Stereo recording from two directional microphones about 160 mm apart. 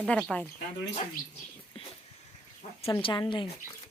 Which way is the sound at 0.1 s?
5° left (ahead or behind).